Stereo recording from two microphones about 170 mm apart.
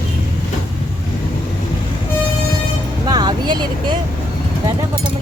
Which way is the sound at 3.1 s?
25° right (ahead or behind).